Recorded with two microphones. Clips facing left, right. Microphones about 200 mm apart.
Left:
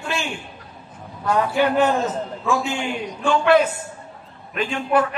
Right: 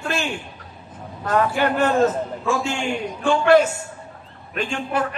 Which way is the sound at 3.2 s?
50° right (ahead or behind).